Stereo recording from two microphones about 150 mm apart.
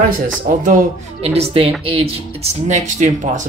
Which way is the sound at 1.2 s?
45° right (ahead or behind).